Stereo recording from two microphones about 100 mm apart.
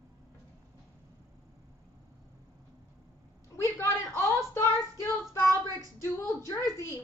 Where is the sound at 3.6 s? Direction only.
25° left (ahead or behind).